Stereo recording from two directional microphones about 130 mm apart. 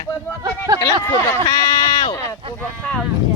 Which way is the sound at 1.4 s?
35° left (ahead or behind).